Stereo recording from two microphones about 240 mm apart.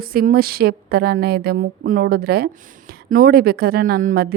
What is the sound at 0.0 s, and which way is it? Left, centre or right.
Speech, right.